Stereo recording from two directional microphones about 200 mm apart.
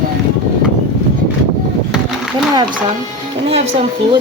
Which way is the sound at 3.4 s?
30° right (ahead or behind).